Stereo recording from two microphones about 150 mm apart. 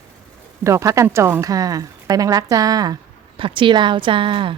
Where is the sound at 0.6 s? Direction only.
20° right (ahead or behind).